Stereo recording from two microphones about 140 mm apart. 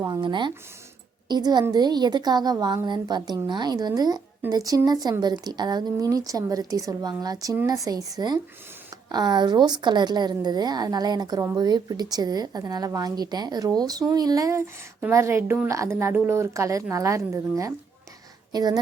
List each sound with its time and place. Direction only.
0.0 s a woman's voice: 30° right (ahead or behind)